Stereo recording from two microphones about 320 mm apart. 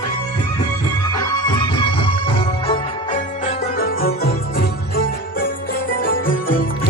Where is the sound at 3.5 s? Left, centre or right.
Left.